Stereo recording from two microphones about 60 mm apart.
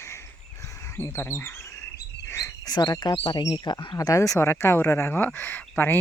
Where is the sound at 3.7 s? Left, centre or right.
Left.